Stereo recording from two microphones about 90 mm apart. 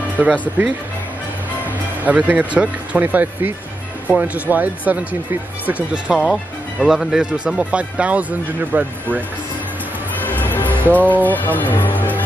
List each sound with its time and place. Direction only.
0.2 s speech: 15° right (ahead or behind)
2.0 s speech: 15° right (ahead or behind)
6.0 s speech: 5° right (ahead or behind)
10.2 s music: 20° left (ahead or behind)
11.2 s speech: 20° left (ahead or behind)